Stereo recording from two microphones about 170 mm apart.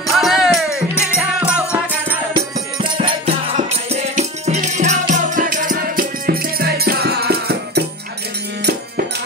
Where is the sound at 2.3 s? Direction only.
30° right (ahead or behind).